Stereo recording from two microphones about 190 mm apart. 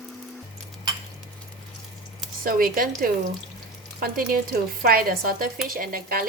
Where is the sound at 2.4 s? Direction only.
45° right (ahead or behind).